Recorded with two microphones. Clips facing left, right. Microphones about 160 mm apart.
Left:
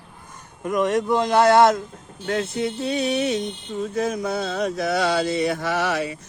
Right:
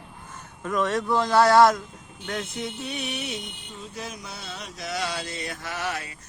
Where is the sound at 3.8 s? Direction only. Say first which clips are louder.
Left 14 dB; 50° left (ahead or behind); by 6.0 s 80° left.